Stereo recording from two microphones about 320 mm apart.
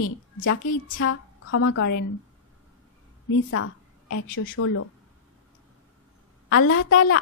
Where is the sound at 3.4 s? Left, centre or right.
Left.